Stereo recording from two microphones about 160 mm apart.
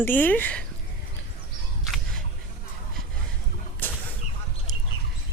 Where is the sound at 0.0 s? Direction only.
10° left (ahead or behind).